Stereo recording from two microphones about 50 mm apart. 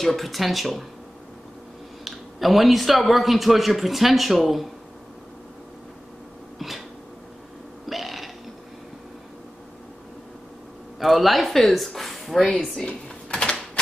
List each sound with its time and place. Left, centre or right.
0.0 s speech: centre
2.0 s speech: centre
7.9 s burping: centre
11.0 s speech: centre
12.7 s typing: centre